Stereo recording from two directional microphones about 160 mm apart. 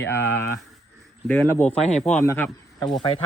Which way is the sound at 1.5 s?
15° left (ahead or behind).